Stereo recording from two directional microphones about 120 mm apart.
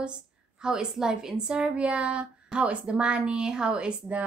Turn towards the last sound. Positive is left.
turn(degrees=-10)  # may be behind; listen again after turning